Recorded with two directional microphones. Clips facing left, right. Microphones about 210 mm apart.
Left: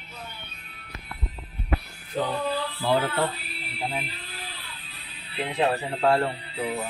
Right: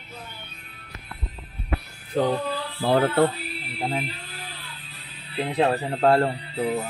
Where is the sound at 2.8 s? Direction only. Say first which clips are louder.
Right 5 dB; 55° right (ahead or behind).